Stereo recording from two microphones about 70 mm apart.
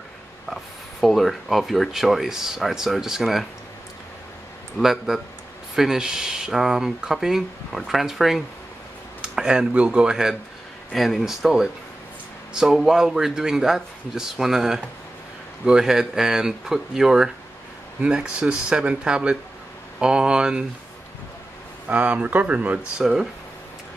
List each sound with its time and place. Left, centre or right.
1.0 s speech: centre
4.7 s speech: centre
10.9 s speech: centre
21.8 s speech: centre